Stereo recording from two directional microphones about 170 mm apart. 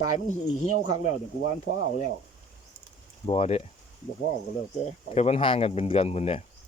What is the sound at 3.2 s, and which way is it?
Speech, 35° left (ahead or behind).